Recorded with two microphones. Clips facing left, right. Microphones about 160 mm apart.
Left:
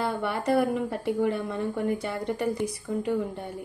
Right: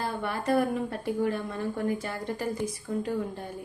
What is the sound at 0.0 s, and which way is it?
A woman's voice, 75° left (ahead or behind).